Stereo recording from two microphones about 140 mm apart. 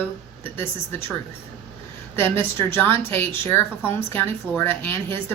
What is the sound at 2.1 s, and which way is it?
A woman's voice, 15° left (ahead or behind).